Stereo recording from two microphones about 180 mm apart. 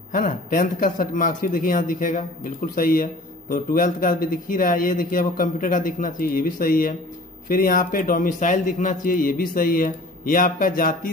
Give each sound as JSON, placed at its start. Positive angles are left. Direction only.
{"t": 0.1, "sound": "speech", "side_deg": 50}